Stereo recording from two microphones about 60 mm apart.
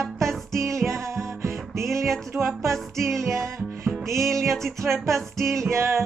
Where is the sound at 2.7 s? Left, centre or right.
Centre.